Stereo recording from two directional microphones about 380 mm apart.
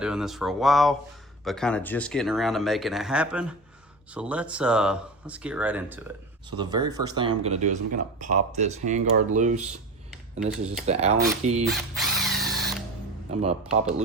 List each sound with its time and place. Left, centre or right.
0.0 s speech: centre
11.6 s music: centre
13.3 s speech: centre